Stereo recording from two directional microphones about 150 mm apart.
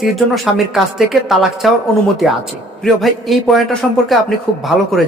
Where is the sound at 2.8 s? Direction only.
Centre (ahead or behind).